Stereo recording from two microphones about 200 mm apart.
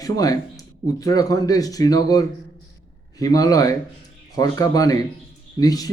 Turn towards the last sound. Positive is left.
turn(degrees=20)  # may be behind; listen again after turning